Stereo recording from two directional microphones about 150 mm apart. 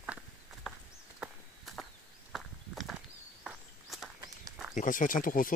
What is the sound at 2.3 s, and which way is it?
Walk, centre (ahead or behind).